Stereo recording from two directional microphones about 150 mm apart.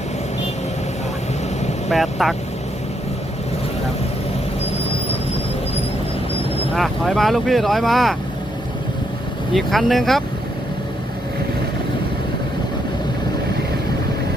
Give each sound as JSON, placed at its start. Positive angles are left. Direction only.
{"t": 1.9, "sound": "speech", "side_deg": 0}
{"t": 6.7, "sound": "speech", "side_deg": 0}
{"t": 9.5, "sound": "speech", "side_deg": 0}